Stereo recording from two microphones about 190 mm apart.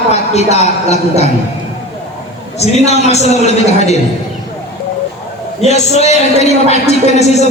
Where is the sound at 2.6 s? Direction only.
35° left (ahead or behind).